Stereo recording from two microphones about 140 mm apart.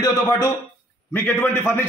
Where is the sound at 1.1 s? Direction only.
15° left (ahead or behind).